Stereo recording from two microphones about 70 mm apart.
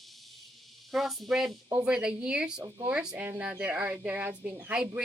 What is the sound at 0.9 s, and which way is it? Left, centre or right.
A woman's voice, centre.